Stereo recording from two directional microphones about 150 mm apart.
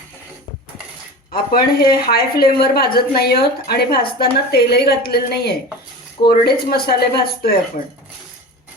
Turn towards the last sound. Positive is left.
turn(degrees=90)